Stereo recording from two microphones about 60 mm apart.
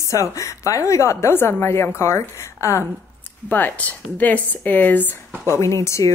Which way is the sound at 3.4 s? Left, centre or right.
Left.